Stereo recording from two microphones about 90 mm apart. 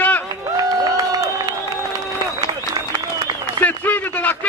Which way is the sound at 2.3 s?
45° right (ahead or behind).